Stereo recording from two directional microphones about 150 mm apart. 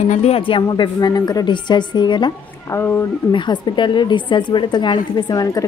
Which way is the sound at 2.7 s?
15° left (ahead or behind).